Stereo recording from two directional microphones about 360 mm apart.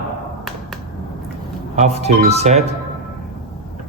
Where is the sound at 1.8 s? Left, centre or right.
Centre.